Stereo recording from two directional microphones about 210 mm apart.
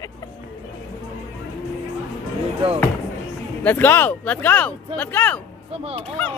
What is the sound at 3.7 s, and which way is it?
Speech, 10° left (ahead or behind).